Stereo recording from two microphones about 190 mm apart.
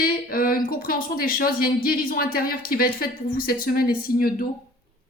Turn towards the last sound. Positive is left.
turn(degrees=50)  # may be behind; listen again after turning